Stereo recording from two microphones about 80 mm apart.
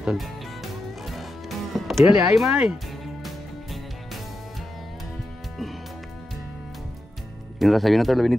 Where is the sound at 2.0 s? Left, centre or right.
Centre.